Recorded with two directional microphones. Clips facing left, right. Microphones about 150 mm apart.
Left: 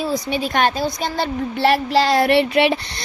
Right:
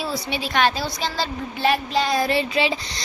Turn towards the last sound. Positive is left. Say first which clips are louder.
# left 6 dB
turn(degrees=60)  # may be behind; listen again after turning